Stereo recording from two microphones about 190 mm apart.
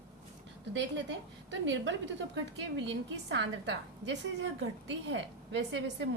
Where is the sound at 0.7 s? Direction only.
70° right (ahead or behind).